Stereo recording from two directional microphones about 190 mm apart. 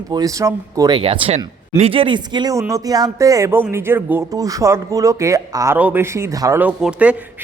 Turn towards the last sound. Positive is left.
turn(degrees=-5)  # may be behind; listen again after turning